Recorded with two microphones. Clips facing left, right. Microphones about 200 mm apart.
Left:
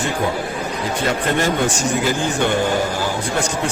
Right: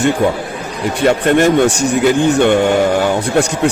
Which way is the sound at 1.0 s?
70° right (ahead or behind).